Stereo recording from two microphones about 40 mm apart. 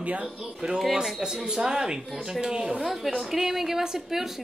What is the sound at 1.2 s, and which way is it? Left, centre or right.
Speech, centre.